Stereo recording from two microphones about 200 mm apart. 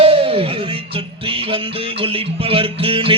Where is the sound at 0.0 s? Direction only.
30° right (ahead or behind).